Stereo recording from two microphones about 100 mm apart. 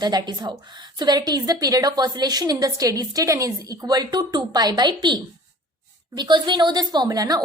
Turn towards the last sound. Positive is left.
turn(degrees=-40)  # may be behind; listen again after turning